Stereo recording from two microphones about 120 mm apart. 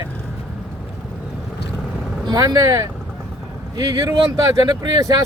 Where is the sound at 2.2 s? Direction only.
30° right (ahead or behind).